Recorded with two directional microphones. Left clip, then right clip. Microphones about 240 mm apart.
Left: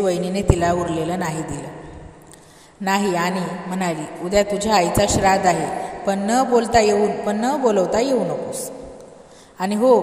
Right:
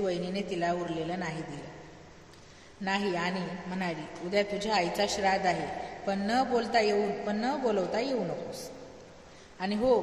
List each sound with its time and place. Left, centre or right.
0.0 s a man's voice: left
2.8 s a man's voice: left
9.6 s a man's voice: left